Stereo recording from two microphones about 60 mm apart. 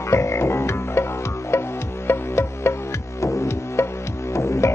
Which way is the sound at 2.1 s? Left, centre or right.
Left.